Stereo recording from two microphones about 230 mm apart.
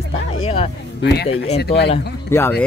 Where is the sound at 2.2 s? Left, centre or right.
Centre.